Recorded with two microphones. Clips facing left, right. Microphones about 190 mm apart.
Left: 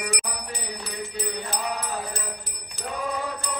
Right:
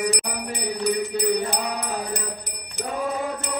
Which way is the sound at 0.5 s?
20° right (ahead or behind).